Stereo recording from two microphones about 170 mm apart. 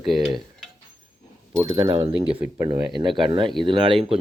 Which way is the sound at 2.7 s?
25° right (ahead or behind).